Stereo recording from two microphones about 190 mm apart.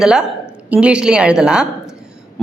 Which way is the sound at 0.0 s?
5° right (ahead or behind).